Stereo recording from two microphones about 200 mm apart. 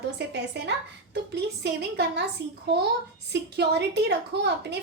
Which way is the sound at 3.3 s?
60° right (ahead or behind).